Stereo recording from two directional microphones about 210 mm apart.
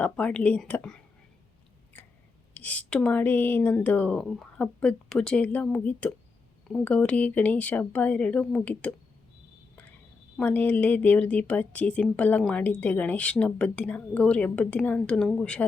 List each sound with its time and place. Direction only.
0.0 s speech: 5° left (ahead or behind)
2.5 s speech: 5° left (ahead or behind)
10.3 s speech: 10° left (ahead or behind)